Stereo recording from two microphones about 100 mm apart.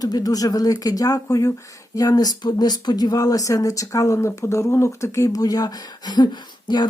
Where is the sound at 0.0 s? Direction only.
40° left (ahead or behind).